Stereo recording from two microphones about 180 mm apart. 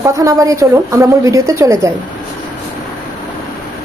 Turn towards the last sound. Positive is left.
turn(degrees=-15)  # may be behind; listen again after turning